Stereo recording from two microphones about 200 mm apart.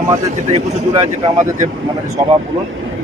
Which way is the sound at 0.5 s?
30° right (ahead or behind).